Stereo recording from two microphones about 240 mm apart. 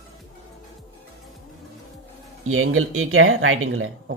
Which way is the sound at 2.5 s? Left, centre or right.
Right.